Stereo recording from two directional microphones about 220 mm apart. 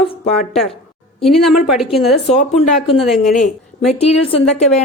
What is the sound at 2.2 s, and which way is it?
Speech, 30° left (ahead or behind).